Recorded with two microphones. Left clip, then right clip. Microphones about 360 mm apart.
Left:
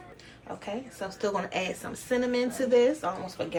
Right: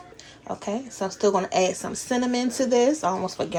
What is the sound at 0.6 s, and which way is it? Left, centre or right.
A woman's voice, centre.